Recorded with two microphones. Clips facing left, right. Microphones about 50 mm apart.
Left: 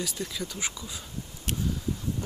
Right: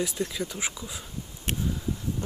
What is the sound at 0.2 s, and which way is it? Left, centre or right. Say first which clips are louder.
Speech: right 3 dB; centre.